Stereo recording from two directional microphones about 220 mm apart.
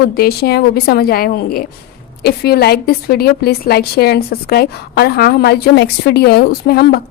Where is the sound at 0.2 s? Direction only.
45° left (ahead or behind).